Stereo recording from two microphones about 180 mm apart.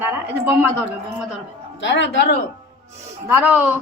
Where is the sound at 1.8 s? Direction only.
85° left.